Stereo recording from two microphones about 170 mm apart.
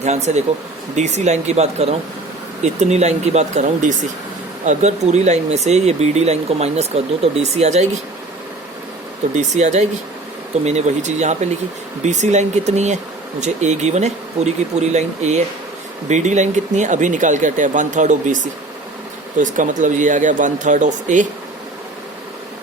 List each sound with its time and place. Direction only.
0.0 s speech: 40° right (ahead or behind)
9.3 s speech: 40° right (ahead or behind)